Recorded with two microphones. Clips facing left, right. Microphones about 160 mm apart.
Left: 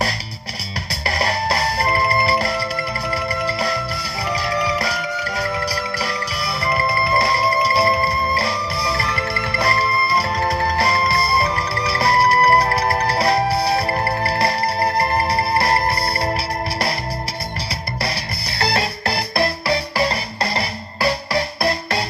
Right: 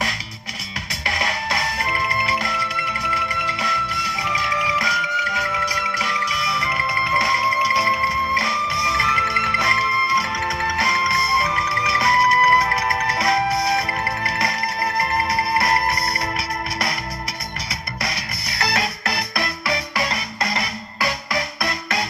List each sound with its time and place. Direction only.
0.9 s music: 35° left (ahead or behind)
17.7 s music: 30° left (ahead or behind)